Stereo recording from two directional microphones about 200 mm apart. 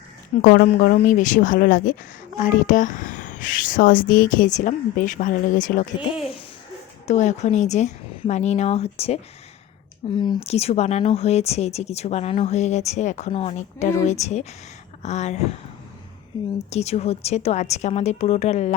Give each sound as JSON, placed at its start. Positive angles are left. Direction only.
{"t": 0.4, "sound": "speech", "side_deg": 45}
{"t": 7.1, "sound": "speech", "side_deg": 35}
{"t": 10.2, "sound": "speech", "side_deg": 20}
{"t": 16.6, "sound": "speech", "side_deg": 30}